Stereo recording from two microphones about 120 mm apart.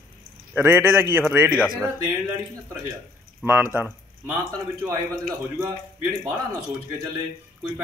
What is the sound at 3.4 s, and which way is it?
Speech, 15° right (ahead or behind).